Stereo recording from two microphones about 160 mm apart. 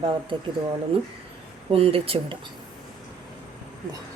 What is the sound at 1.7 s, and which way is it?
Speech, 35° right (ahead or behind).